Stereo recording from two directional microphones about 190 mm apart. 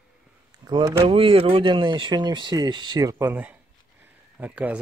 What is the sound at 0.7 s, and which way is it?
Speech, 20° right (ahead or behind).